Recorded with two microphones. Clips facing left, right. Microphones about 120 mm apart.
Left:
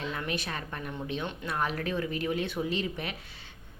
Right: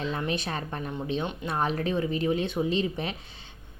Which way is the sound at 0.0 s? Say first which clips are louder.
Right 4 dB; 30° right (ahead or behind).